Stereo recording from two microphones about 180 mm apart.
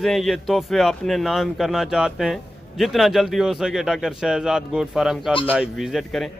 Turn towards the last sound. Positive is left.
turn(degrees=0)  # may be behind; listen again after turning